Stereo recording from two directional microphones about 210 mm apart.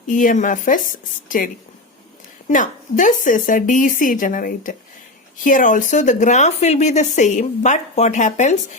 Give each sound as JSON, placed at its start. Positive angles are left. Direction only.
{"t": 0.1, "sound": "speech", "side_deg": 40}